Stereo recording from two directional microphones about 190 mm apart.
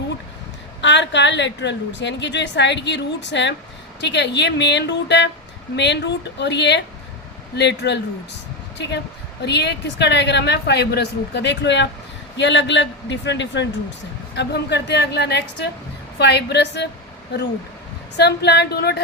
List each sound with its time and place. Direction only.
0.8 s a woman's voice: 70° left (ahead or behind)
9.4 s a woman's voice: 60° left (ahead or behind)
18.2 s a woman's voice: 60° left (ahead or behind)